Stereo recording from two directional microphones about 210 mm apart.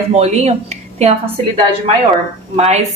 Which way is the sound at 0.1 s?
30° right (ahead or behind).